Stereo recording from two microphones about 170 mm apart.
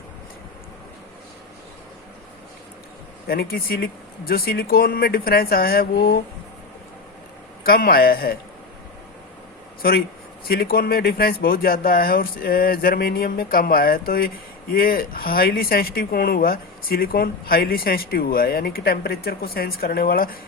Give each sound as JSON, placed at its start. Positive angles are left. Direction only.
{"t": 3.2, "sound": "speech", "side_deg": 60}
{"t": 7.6, "sound": "speech", "side_deg": 60}
{"t": 10.5, "sound": "speech", "side_deg": 65}